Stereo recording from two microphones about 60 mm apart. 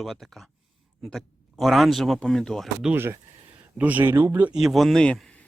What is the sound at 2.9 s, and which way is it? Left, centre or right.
Speech, right.